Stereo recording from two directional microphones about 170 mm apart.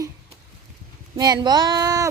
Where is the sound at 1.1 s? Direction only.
25° right (ahead or behind).